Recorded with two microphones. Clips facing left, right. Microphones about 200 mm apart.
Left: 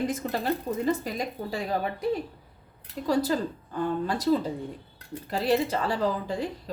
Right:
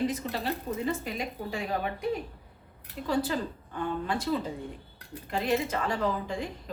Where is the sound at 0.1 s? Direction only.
50° left (ahead or behind).